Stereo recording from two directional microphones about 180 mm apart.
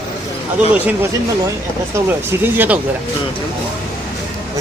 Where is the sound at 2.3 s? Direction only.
10° right (ahead or behind).